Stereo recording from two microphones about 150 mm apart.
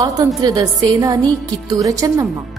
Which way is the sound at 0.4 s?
25° right (ahead or behind).